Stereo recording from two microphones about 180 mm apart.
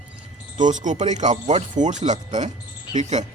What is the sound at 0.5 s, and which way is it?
Speech, 45° right (ahead or behind).